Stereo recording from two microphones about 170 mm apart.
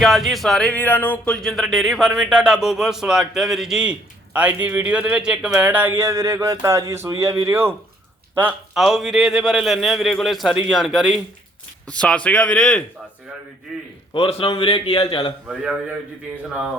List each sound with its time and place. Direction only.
0.0 s a man's voice: centre (ahead or behind)
14.1 s a man's voice: 30° left (ahead or behind)
15.4 s speech: 5° right (ahead or behind)